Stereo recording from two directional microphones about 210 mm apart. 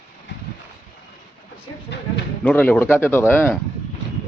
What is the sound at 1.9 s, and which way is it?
Speech, 55° left (ahead or behind).